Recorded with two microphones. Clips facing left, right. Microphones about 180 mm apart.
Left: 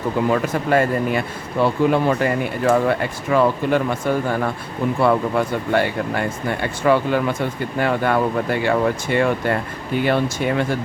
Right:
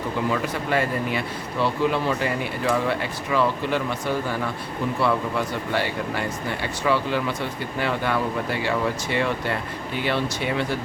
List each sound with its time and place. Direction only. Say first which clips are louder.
0.3 s speech: left 6 dB; 45° left (ahead or behind)